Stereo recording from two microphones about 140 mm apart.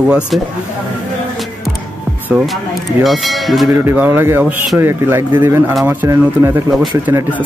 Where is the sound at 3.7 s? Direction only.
15° right (ahead or behind).